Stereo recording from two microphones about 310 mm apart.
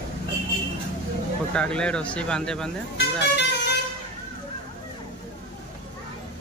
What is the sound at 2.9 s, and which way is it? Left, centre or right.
Speech, left.